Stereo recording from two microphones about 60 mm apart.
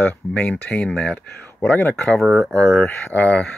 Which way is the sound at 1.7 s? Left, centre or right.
Left.